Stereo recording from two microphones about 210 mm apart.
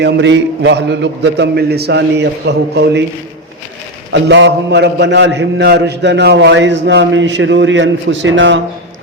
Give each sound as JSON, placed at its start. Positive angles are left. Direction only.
{"t": 0.0, "sound": "a man's voice", "side_deg": -55}
{"t": 4.1, "sound": "a man's voice", "side_deg": -55}